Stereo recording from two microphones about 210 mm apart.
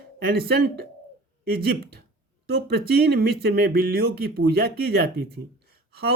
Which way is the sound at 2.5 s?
50° right (ahead or behind).